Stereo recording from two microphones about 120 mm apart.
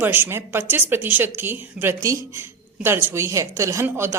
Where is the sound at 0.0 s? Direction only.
15° right (ahead or behind).